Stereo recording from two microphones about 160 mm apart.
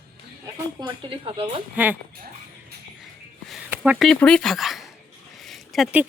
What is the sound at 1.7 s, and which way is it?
Speech, 10° right (ahead or behind).